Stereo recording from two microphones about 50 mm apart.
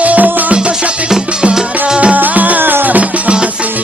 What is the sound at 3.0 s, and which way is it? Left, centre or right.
Music, right.